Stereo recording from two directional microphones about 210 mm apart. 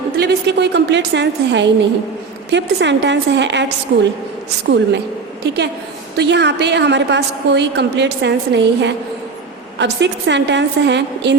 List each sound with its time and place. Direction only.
0.2 s a woman's voice: 55° right (ahead or behind)
6.1 s a woman's voice: 55° right (ahead or behind)